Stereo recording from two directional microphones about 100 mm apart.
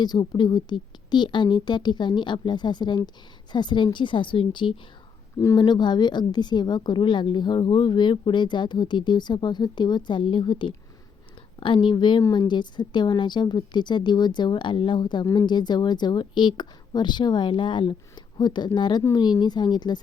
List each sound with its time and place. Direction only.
0.0 s a woman's voice: 45° left (ahead or behind)